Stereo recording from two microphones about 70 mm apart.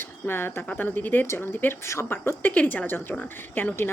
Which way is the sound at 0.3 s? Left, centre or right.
Left.